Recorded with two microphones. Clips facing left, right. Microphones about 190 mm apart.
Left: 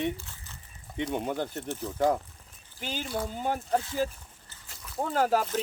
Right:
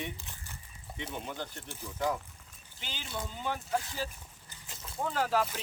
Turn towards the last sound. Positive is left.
turn(degrees=45)  # may be behind; listen again after turning